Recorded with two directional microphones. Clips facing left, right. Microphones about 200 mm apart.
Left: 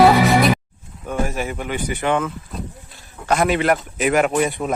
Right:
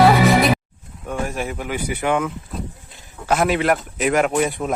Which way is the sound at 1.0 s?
Centre (ahead or behind).